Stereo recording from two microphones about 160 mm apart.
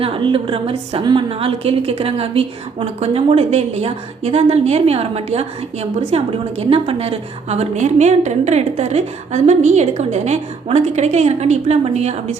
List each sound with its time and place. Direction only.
0.0 s a woman's voice: 35° right (ahead or behind)